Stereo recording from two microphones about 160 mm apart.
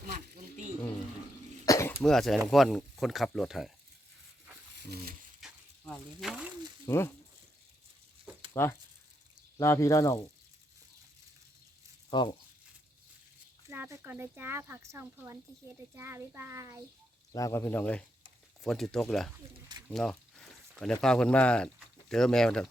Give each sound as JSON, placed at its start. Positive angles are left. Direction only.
{"t": 0.1, "sound": "wild animals", "side_deg": -45}
{"t": 1.6, "sound": "cough", "side_deg": 20}
{"t": 2.0, "sound": "speech", "side_deg": 0}
{"t": 4.8, "sound": "speech", "side_deg": -85}
{"t": 5.4, "sound": "a sound", "side_deg": 5}
{"t": 6.8, "sound": "speech", "side_deg": 15}
{"t": 8.6, "sound": "speech", "side_deg": 15}
{"t": 12.1, "sound": "speech", "side_deg": 30}
{"t": 13.7, "sound": "speech", "side_deg": -15}
{"t": 17.3, "sound": "speech", "side_deg": 20}